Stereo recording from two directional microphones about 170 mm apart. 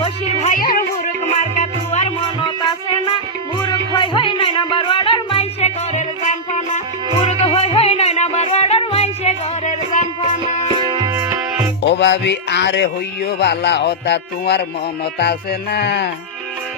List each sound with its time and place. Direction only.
0.0 s music: 40° left (ahead or behind)
0.6 s music: 50° left (ahead or behind)
3.7 s music: 30° left (ahead or behind); by 10.1 s 45° left (ahead or behind)
11.0 s music: 15° right (ahead or behind)
11.9 s a man's voice: 90° left
15.2 s music: 75° left (ahead or behind)